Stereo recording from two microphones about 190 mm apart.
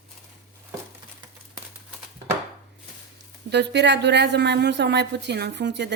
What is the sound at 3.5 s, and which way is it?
A woman's voice, 65° right (ahead or behind).